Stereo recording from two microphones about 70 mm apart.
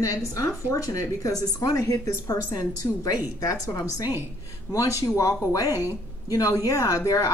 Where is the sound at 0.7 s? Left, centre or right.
Left.